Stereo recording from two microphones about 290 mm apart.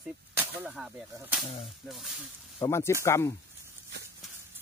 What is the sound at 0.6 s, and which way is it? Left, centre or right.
Whip, centre.